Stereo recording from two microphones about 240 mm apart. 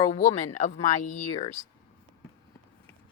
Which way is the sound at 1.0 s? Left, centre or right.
Left.